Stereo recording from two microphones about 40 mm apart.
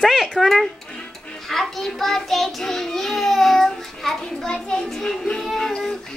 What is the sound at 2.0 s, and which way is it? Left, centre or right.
Child singing, centre.